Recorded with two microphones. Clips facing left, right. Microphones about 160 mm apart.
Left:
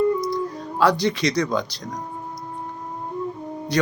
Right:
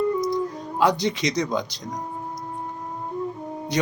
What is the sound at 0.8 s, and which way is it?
Speech, 20° right (ahead or behind).